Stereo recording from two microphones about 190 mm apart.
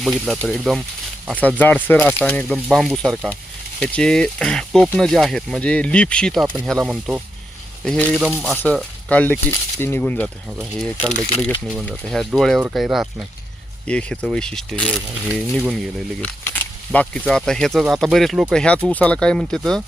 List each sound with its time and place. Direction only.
0.0 s speech: centre (ahead or behind)